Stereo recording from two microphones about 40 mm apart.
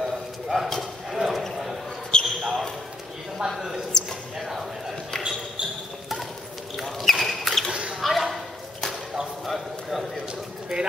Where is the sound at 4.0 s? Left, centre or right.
Centre.